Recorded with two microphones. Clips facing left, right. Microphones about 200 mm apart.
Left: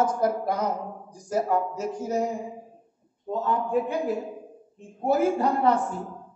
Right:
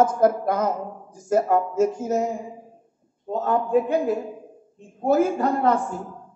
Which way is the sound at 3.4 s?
50° right (ahead or behind).